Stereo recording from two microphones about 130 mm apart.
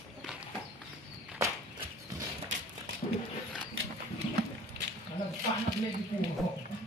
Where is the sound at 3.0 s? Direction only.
65° left (ahead or behind).